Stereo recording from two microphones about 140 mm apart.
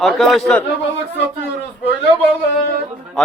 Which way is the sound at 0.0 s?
Centre (ahead or behind).